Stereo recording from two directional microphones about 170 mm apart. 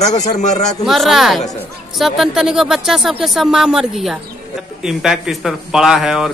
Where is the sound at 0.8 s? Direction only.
Centre (ahead or behind).